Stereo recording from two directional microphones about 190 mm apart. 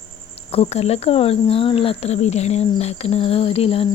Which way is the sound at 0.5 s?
35° left (ahead or behind).